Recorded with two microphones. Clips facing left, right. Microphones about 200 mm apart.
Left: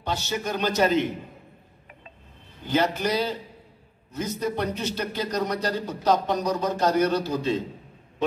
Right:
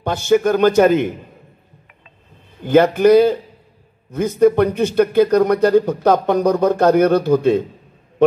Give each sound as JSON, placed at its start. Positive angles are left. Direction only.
{"t": 0.0, "sound": "a man's voice", "side_deg": -50}
{"t": 2.6, "sound": "a man's voice", "side_deg": -55}